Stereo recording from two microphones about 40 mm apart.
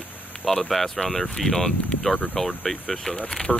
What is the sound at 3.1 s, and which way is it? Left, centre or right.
Speech, left.